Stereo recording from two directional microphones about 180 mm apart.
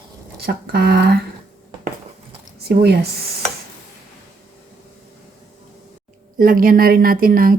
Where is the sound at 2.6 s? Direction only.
65° right (ahead or behind).